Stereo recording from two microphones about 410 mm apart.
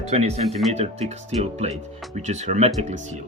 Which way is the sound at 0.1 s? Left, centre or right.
Centre.